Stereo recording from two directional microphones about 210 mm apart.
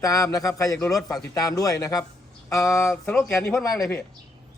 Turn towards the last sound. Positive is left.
turn(degrees=10)  # may be behind; listen again after turning